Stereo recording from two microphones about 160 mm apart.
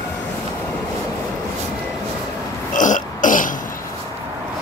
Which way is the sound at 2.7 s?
55° left (ahead or behind).